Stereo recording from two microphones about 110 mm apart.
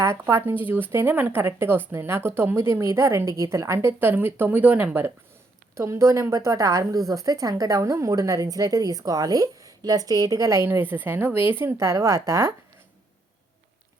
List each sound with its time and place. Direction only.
0.0 s a woman's voice: 25° right (ahead or behind)